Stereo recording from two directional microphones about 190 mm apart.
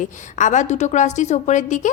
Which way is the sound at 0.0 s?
40° left (ahead or behind).